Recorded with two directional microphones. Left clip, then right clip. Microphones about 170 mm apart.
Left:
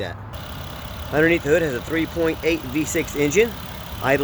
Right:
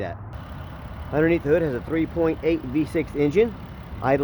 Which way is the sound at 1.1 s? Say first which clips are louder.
Left 3 dB; 10° right (ahead or behind).